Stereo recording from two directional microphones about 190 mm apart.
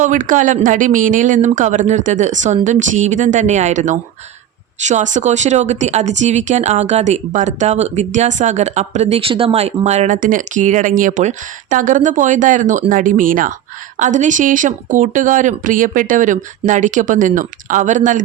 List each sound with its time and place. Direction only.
0.0 s speech: 40° right (ahead or behind)